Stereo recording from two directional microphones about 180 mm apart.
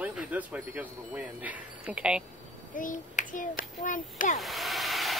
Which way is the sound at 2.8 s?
45° left (ahead or behind).